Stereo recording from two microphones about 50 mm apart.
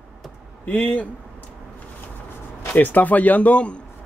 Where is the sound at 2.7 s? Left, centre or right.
Left.